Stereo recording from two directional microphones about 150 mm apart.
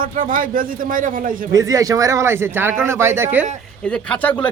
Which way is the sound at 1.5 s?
20° right (ahead or behind).